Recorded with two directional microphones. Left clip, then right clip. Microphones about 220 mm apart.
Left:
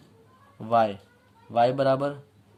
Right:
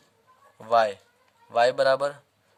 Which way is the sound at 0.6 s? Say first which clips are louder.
Right 1 dB; 35° right (ahead or behind).